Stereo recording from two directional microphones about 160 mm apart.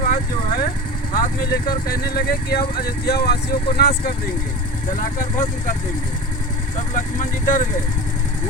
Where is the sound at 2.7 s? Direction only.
85° left.